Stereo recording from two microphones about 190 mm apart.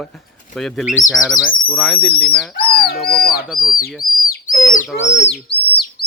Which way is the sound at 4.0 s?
50° left (ahead or behind).